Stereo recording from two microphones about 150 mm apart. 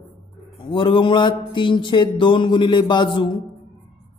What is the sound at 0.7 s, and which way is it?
A man's voice, 35° left (ahead or behind).